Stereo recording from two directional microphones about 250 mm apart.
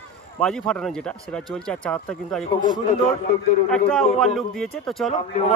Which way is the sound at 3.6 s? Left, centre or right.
Centre.